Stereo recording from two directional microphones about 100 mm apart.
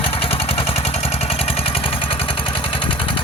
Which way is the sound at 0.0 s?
65° left (ahead or behind).